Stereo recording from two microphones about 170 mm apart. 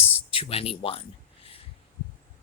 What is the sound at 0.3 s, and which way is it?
Speech, 35° left (ahead or behind).